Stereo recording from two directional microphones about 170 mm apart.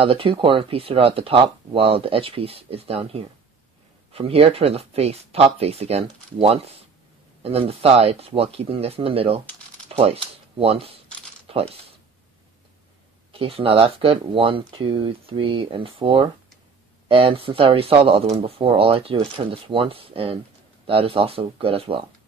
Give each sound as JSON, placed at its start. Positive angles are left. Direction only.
{"t": 0.0, "sound": "speech", "side_deg": -35}
{"t": 11.4, "sound": "coin", "side_deg": -35}
{"t": 13.3, "sound": "speech", "side_deg": -35}